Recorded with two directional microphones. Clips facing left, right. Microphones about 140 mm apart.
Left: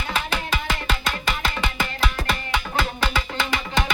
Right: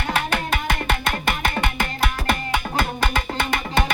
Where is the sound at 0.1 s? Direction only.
55° right (ahead or behind).